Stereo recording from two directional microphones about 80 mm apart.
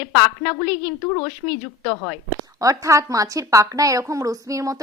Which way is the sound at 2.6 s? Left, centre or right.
Right.